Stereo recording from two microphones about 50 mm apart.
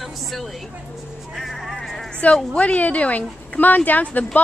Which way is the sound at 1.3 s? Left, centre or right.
Centre.